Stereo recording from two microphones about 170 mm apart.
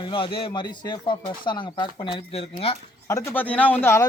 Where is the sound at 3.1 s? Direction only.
15° left (ahead or behind).